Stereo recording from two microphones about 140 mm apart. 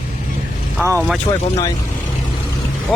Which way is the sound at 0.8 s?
20° right (ahead or behind).